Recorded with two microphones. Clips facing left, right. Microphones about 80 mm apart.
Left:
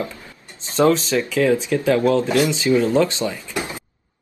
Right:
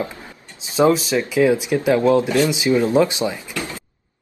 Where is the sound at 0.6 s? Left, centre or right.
Centre.